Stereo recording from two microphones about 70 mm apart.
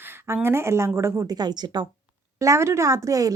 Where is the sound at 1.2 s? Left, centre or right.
Right.